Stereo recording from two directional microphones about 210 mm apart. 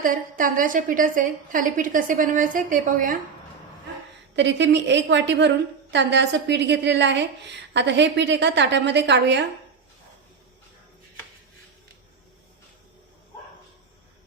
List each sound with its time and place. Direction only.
0.0 s a woman's voice: 40° right (ahead or behind)
4.4 s a woman's voice: 55° right (ahead or behind)